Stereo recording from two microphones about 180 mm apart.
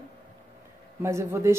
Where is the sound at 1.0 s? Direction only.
15° right (ahead or behind).